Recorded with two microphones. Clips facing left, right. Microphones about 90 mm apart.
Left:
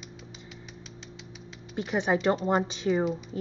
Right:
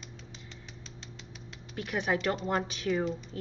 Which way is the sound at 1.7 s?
25° left (ahead or behind).